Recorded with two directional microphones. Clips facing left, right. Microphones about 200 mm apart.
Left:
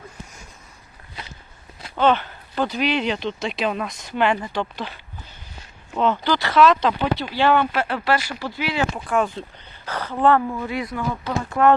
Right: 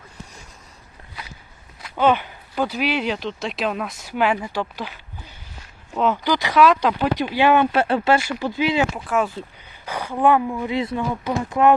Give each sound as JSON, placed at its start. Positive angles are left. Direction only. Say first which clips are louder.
{"t": 2.0, "sound": "speech", "louder": "even", "side_deg": -10}
{"t": 7.7, "sound": "speech", "louder": "right 4 dB", "side_deg": -25}
{"t": 9.0, "sound": "speech", "louder": "even", "side_deg": -5}
{"t": 10.7, "sound": "speech", "louder": "right 3 dB", "side_deg": -25}